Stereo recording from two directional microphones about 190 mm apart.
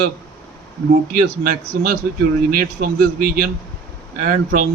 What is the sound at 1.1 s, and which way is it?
A man's voice, 50° right (ahead or behind).